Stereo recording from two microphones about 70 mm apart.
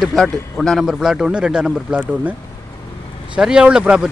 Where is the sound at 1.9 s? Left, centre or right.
Right.